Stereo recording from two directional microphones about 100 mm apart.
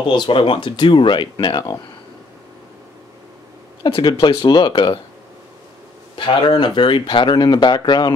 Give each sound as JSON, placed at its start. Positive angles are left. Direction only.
{"t": 0.1, "sound": "speech", "side_deg": 60}
{"t": 3.8, "sound": "speech", "side_deg": 55}
{"t": 6.1, "sound": "speech", "side_deg": 50}